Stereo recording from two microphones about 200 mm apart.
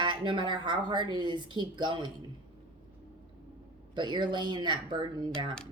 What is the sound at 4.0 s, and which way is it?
Speech, 25° right (ahead or behind).